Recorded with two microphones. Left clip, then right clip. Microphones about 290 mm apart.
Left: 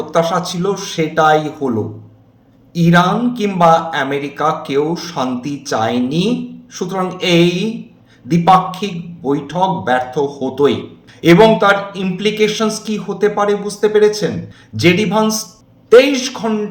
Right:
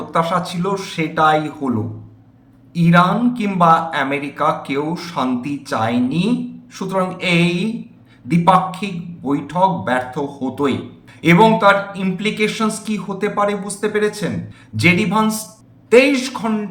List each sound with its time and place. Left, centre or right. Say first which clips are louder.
0.1 s speech: left 2 dB; centre
8.8 s speech: left 4 dB; centre